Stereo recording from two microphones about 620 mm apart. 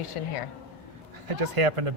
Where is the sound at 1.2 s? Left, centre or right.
Right.